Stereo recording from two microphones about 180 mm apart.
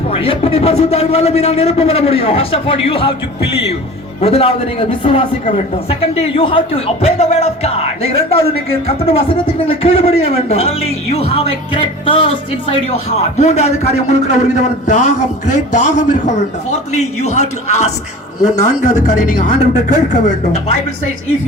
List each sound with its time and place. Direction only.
0.1 s a man's voice: 30° left (ahead or behind)
4.2 s a man's voice: 35° left (ahead or behind)
8.9 s a man's voice: 30° left (ahead or behind)
11.7 s music: 30° left (ahead or behind)
13.4 s a man's voice: 35° left (ahead or behind)